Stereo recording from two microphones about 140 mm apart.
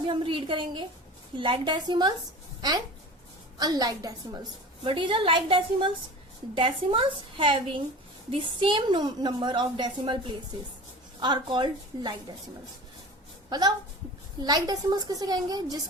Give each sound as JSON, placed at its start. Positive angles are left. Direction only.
{"t": 0.1, "sound": "a woman's voice", "side_deg": -35}
{"t": 13.5, "sound": "a woman's voice", "side_deg": -30}